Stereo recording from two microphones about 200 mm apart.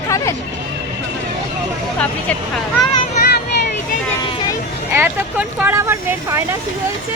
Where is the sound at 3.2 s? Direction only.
50° left (ahead or behind).